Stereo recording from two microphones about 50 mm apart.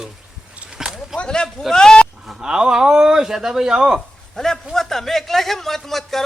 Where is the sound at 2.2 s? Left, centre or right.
Centre.